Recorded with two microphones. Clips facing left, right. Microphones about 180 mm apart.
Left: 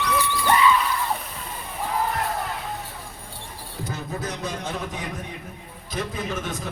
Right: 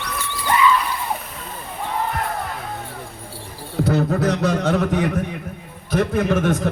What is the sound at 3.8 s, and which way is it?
A man's voice, 70° right (ahead or behind).